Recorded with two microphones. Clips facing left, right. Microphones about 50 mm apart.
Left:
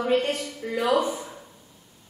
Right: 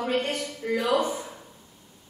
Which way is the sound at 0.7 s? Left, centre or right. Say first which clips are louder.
Left 2 dB; centre.